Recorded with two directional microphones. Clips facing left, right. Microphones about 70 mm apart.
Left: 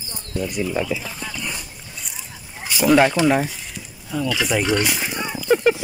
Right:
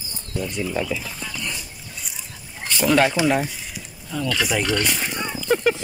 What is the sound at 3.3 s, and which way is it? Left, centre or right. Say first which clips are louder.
Speech: left 2 dB; centre.